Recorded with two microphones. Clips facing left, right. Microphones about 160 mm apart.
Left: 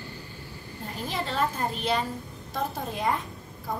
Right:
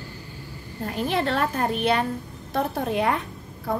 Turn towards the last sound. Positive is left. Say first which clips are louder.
# right 6 dB
turn(degrees=-65)  # may be behind; listen again after turning